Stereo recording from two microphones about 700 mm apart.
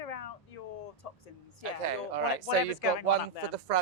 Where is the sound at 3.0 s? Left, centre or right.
Right.